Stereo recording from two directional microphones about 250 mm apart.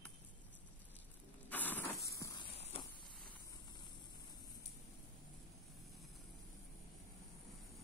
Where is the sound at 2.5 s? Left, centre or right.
Left.